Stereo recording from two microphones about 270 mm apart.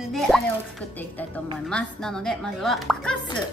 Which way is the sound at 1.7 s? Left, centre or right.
Centre.